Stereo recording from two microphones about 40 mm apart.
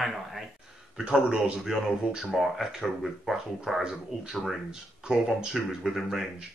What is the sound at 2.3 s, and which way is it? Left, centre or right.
Speech, centre.